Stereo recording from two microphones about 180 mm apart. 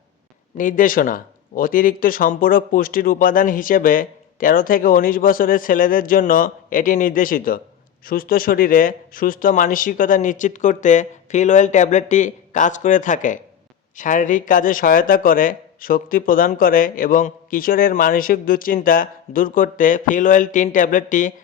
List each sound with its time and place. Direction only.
0.5 s a man's voice: 50° left (ahead or behind)